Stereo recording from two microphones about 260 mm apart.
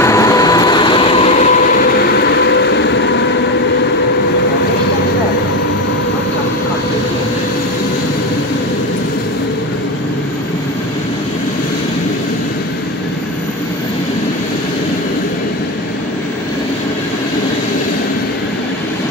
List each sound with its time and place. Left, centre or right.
0.0 s train: centre; by 3.3 s left